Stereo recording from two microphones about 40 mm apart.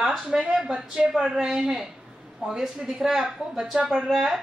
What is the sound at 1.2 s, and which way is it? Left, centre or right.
A woman's voice, centre.